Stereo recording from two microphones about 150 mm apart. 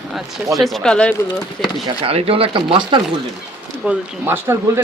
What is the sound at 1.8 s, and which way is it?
Speech, 40° right (ahead or behind).